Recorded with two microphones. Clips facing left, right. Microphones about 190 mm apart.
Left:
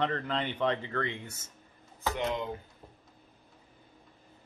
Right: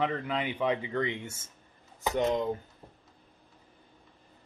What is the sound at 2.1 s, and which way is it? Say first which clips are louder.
Speech: right 7 dB; 40° right (ahead or behind).